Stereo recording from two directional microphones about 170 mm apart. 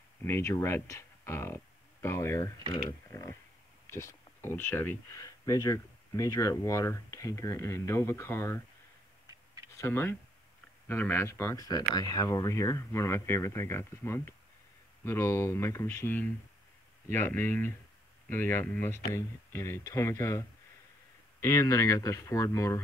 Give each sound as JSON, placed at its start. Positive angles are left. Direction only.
{"t": 0.2, "sound": "speech", "side_deg": 15}
{"t": 9.8, "sound": "speech", "side_deg": 15}